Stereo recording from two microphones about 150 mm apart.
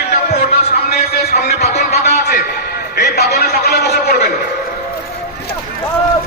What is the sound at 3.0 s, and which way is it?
A man's voice, 90° left.